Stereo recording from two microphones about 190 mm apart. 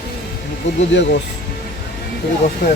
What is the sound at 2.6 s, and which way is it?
Speech, 45° left (ahead or behind).